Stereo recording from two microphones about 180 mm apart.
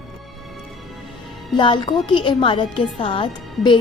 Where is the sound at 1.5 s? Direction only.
25° left (ahead or behind).